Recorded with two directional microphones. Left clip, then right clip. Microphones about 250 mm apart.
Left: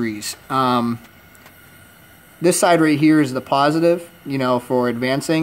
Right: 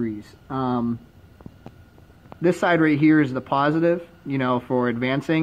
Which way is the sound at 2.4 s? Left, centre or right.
Centre.